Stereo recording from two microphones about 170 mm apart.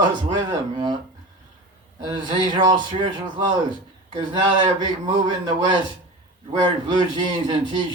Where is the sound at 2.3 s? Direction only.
25° right (ahead or behind).